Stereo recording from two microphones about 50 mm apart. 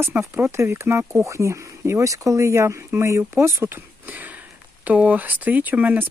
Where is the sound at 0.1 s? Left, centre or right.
Right.